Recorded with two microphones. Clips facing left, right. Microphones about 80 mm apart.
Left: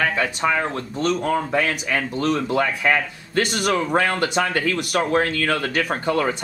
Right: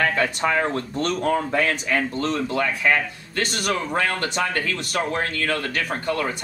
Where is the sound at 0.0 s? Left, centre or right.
Centre.